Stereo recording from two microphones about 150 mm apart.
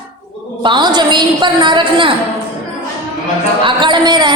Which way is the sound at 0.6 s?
30° right (ahead or behind).